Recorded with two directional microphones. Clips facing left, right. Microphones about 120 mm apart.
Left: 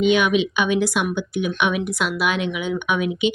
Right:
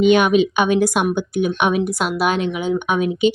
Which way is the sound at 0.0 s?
50° right (ahead or behind).